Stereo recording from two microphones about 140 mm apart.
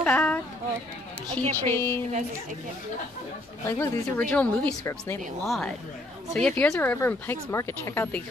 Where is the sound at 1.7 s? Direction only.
15° left (ahead or behind).